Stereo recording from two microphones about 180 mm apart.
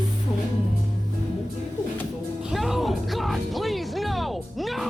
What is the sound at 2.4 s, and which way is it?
Music, centre (ahead or behind).